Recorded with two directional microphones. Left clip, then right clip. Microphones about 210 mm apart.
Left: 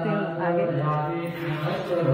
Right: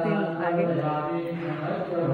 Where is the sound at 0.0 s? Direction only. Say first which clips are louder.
Even; 15° right (ahead or behind).